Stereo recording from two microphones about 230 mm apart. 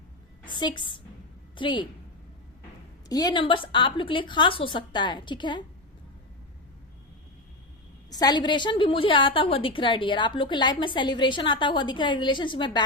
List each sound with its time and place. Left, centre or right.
0.4 s a woman's voice: centre
3.1 s a woman's voice: centre
8.1 s a woman's voice: centre